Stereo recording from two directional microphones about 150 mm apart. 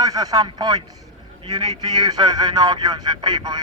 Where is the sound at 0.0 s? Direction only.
25° right (ahead or behind).